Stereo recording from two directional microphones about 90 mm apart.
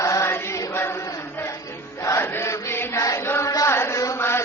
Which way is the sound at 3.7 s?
30° left (ahead or behind).